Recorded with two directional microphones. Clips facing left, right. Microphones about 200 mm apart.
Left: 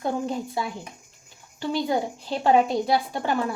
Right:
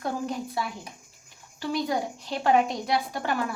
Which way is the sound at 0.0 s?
25° left (ahead or behind).